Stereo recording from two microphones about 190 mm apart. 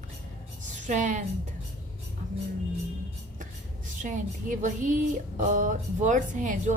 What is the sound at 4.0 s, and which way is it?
Speech, 40° right (ahead or behind).